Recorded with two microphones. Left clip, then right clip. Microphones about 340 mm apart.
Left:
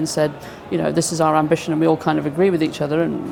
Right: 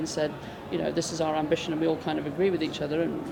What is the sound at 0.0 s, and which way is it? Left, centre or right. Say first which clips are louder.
Speech: left 9 dB; left.